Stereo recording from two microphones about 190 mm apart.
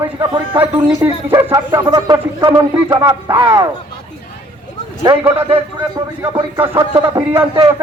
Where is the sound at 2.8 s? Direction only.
25° right (ahead or behind).